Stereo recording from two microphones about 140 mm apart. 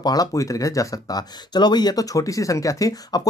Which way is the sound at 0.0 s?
25° left (ahead or behind).